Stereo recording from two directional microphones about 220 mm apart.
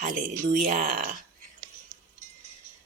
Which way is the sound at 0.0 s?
35° right (ahead or behind).